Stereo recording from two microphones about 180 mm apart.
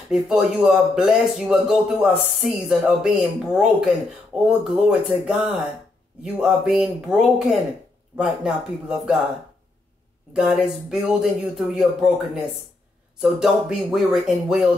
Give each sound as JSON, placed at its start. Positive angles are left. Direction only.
{"t": 0.1, "sound": "speech", "side_deg": -5}
{"t": 10.3, "sound": "speech", "side_deg": 0}